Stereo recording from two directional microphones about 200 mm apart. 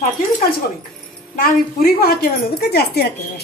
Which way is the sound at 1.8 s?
45° left (ahead or behind).